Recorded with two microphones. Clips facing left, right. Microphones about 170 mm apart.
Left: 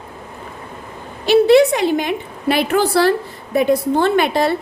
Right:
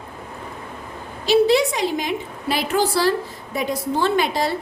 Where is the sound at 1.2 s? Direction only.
60° left (ahead or behind).